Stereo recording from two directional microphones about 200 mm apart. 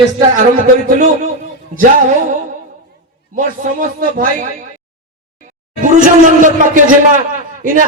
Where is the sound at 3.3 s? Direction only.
40° right (ahead or behind).